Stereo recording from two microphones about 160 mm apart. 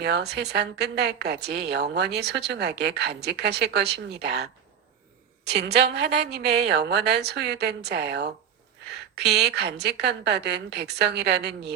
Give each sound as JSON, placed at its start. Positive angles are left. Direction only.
{"t": 0.0, "sound": "a woman's voice", "side_deg": -90}
{"t": 5.5, "sound": "a woman's voice", "side_deg": -90}
{"t": 9.3, "sound": "a woman's voice", "side_deg": -90}